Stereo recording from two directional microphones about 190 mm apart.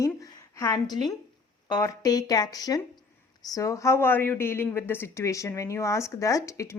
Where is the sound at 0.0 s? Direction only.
15° left (ahead or behind).